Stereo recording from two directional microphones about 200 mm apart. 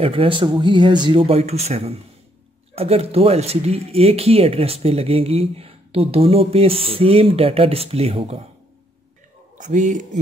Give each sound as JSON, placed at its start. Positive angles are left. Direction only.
{"t": 0.0, "sound": "speech", "side_deg": -25}
{"t": 9.6, "sound": "speech", "side_deg": -35}